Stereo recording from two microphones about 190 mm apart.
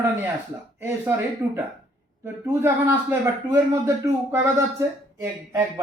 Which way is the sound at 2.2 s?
10° right (ahead or behind).